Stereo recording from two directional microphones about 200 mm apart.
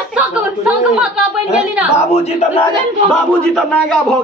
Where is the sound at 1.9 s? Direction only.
35° left (ahead or behind).